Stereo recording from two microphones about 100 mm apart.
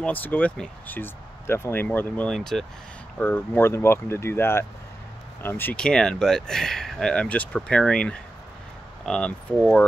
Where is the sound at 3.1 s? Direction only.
20° left (ahead or behind).